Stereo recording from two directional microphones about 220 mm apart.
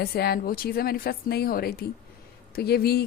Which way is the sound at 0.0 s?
45° left (ahead or behind).